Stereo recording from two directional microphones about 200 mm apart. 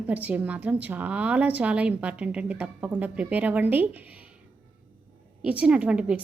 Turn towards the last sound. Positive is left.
turn(degrees=-5)  # may be behind; listen again after turning